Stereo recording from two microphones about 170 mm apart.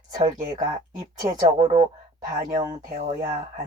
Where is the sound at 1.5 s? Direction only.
25° right (ahead or behind).